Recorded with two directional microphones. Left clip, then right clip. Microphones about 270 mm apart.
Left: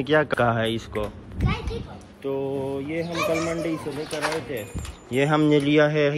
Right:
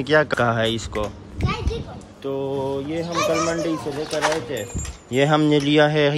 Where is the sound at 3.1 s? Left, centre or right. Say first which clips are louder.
Right 4 dB; right.